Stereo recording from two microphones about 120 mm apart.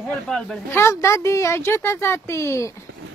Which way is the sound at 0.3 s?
5° left (ahead or behind).